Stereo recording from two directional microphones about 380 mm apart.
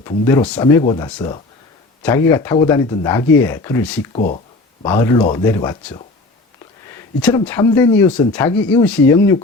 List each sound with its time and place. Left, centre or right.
0.0 s speech: centre
4.1 s speech: left
7.2 s speech: centre